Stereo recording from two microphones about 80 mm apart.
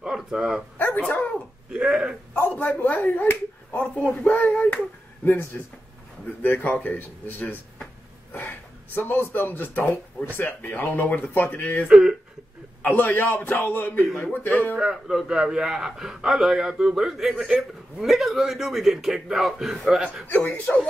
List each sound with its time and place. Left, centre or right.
0.0 s speech: centre
0.7 s dog: left
1.7 s a sound: centre
2.3 s a man's voice: left
11.9 s speech: centre
12.8 s a man's voice: left
14.8 s a man's voice: centre
20.2 s a man's voice: left